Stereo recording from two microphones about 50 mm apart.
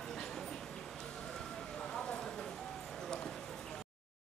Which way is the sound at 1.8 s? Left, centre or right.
Centre.